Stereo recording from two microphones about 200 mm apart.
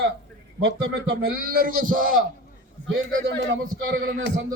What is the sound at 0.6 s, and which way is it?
Speech, 85° right.